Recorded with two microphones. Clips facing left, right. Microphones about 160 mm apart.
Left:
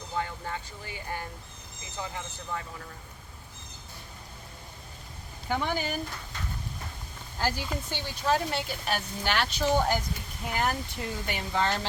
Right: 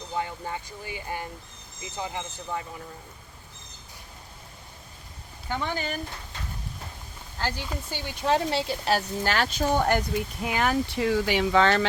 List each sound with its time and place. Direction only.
0.2 s speech: 15° right (ahead or behind)
5.5 s speech: 10° left (ahead or behind)
7.3 s speech: 10° left (ahead or behind)
7.7 s speech: 10° right (ahead or behind)
8.3 s speech: 30° right (ahead or behind); by 10.0 s 55° right (ahead or behind)
10.4 s speech: 90° right